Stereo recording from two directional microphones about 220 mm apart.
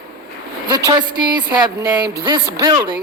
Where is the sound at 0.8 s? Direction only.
20° right (ahead or behind).